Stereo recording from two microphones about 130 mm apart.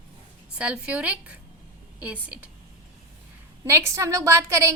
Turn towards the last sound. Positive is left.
turn(degrees=-25)  # may be behind; listen again after turning